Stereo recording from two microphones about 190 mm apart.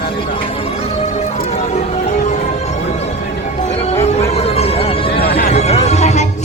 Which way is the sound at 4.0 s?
35° left (ahead or behind).